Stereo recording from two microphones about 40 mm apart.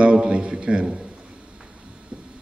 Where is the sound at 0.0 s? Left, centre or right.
Right.